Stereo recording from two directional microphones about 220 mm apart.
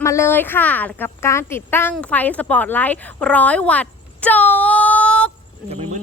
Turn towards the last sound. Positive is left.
turn(degrees=-30)  # may be behind; listen again after turning